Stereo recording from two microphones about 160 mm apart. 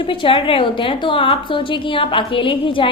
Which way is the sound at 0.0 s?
35° left (ahead or behind).